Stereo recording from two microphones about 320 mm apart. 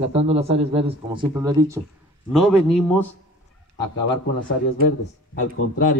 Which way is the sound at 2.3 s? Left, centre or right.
Centre.